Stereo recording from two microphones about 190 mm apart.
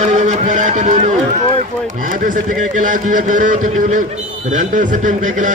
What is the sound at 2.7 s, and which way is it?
A man's voice, 45° right (ahead or behind).